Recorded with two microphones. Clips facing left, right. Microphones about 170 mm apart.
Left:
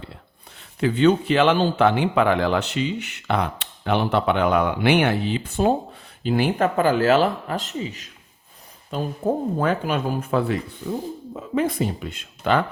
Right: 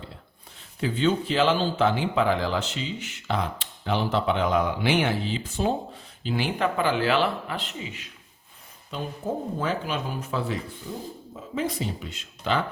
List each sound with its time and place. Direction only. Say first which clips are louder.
0.8 s speech: left 6 dB; 65° left (ahead or behind); by 8.1 s 40° left (ahead or behind)
8.9 s speech: left 7 dB; 55° left (ahead or behind)
10.8 s speech: left 11 dB; 75° left (ahead or behind)
11.3 s speech: left 6 dB; 60° left (ahead or behind)